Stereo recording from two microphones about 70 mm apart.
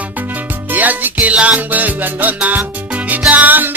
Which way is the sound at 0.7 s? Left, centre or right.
Right.